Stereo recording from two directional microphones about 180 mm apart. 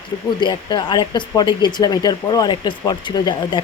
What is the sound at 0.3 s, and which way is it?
Speech, 25° left (ahead or behind).